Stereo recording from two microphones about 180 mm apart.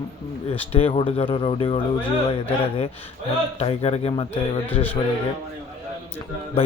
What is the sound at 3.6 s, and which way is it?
A man's voice, 35° left (ahead or behind).